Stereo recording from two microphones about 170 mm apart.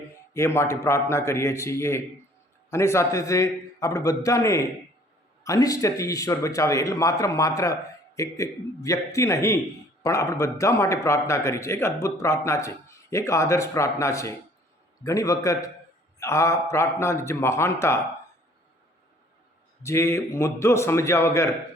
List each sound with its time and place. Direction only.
0.3 s a man's voice: 15° left (ahead or behind)
19.8 s a man's voice: 15° left (ahead or behind)